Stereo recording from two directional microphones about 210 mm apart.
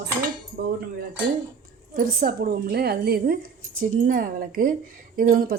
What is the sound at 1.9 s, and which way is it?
Speech, 45° right (ahead or behind).